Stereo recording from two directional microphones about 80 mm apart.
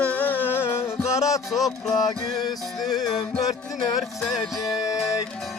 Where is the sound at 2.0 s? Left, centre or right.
Left.